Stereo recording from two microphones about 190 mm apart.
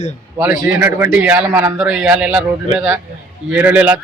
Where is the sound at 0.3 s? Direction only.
10° right (ahead or behind).